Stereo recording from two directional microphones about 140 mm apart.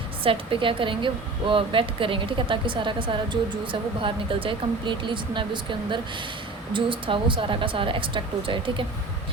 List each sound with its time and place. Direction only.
0.3 s a woman's voice: 40° right (ahead or behind)
6.7 s a woman's voice: 35° right (ahead or behind)